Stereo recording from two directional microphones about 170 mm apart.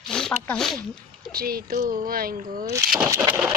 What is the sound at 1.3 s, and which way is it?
Speech, 60° right (ahead or behind).